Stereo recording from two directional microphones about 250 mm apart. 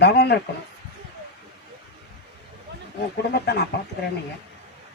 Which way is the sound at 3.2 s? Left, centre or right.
Left.